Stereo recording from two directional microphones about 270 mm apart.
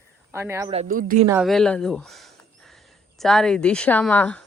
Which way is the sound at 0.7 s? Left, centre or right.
Right.